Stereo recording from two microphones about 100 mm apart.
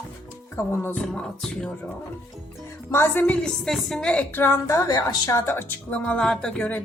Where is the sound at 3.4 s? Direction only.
5° left (ahead or behind).